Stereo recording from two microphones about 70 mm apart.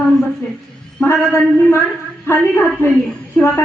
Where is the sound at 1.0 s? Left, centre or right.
Left.